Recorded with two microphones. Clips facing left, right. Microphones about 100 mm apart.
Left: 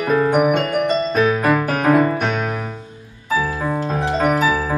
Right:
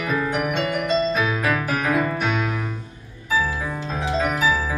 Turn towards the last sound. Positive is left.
turn(degrees=50)  # may be behind; listen again after turning